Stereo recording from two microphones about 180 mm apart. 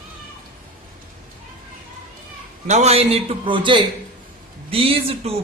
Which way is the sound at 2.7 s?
35° right (ahead or behind).